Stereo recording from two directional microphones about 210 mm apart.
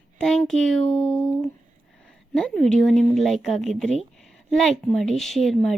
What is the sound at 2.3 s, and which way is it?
A woman's voice, 5° left (ahead or behind).